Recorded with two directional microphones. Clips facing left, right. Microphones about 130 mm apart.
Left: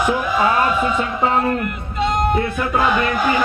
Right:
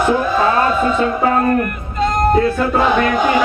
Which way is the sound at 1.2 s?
20° left (ahead or behind).